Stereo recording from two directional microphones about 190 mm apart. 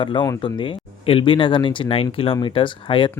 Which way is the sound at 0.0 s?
25° left (ahead or behind).